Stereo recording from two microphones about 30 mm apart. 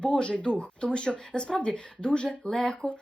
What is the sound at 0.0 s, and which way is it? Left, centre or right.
Speech, left.